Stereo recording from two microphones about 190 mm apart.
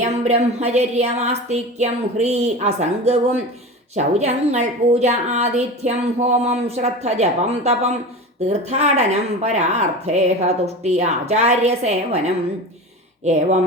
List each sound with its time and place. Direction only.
0.3 s a woman's voice: 35° right (ahead or behind)